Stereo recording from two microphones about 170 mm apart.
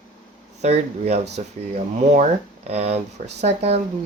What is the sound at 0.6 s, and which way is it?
Speech, 40° right (ahead or behind).